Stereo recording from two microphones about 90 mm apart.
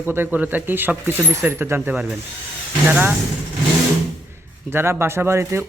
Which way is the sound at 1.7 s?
15° right (ahead or behind).